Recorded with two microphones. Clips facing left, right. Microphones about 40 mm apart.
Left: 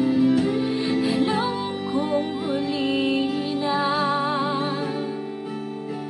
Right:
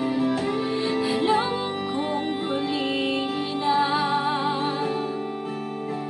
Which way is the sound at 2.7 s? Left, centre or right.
Centre.